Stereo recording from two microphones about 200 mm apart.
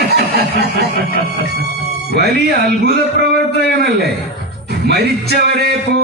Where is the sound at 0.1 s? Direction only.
55° right (ahead or behind).